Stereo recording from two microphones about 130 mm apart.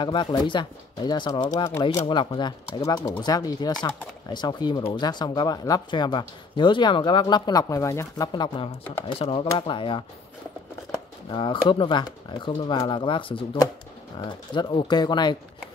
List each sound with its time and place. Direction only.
0.0 s speech: 35° left (ahead or behind)
8.3 s speech: 40° left (ahead or behind)